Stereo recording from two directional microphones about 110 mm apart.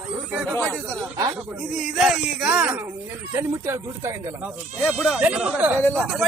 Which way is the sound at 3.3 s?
25° right (ahead or behind).